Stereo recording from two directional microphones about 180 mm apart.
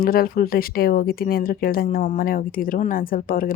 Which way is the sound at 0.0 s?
55° left (ahead or behind).